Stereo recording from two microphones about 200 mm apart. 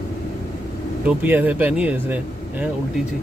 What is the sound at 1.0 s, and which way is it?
Speech, 10° right (ahead or behind).